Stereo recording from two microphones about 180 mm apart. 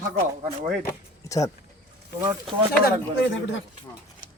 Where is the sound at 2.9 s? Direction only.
90° left.